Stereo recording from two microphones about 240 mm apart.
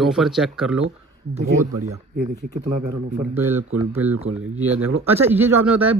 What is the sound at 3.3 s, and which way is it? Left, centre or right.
Speech, centre.